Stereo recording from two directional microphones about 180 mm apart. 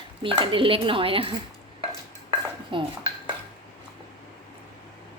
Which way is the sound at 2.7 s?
30° right (ahead or behind).